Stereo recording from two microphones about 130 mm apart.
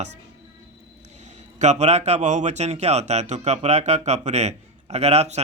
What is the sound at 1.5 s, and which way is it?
A man's voice, 60° right (ahead or behind).